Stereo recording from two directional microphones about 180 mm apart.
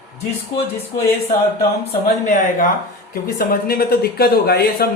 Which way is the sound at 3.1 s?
55° left (ahead or behind).